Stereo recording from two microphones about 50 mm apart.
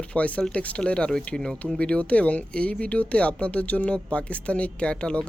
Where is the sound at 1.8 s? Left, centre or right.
Left.